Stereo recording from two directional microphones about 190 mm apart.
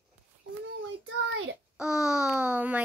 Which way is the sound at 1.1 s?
90° right.